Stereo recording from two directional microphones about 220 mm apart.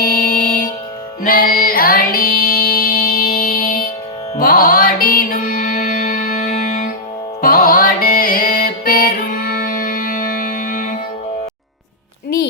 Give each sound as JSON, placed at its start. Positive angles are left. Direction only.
{"t": 0.0, "sound": "music", "side_deg": 40}